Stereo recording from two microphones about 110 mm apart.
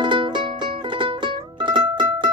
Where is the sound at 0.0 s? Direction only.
45° right (ahead or behind).